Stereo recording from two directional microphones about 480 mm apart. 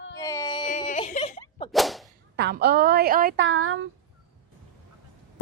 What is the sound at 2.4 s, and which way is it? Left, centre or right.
A woman's voice, centre.